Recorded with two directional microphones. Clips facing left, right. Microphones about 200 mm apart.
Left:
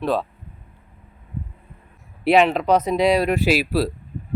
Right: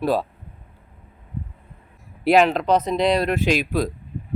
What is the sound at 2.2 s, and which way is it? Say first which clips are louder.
Speech: even; centre (ahead or behind).